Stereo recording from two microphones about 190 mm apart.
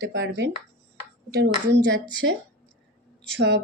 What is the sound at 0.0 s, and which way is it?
Speech, 70° right (ahead or behind).